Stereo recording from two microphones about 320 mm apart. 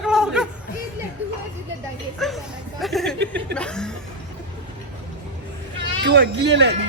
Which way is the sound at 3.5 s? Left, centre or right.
Centre.